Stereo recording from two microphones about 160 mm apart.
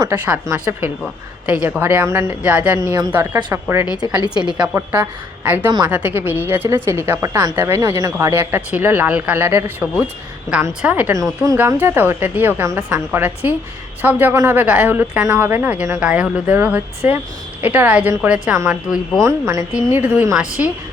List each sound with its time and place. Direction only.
0.0 s a woman's voice: 20° right (ahead or behind)